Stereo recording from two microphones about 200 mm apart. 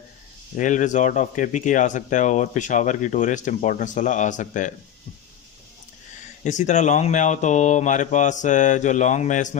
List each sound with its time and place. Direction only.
0.5 s speech: 40° left (ahead or behind)
6.4 s speech: 35° left (ahead or behind)